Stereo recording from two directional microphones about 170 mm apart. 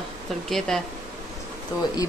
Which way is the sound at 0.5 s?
5° left (ahead or behind).